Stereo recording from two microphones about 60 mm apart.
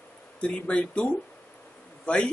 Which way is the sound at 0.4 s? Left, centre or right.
Centre.